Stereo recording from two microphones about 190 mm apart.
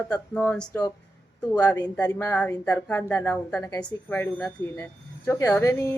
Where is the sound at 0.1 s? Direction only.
5° left (ahead or behind).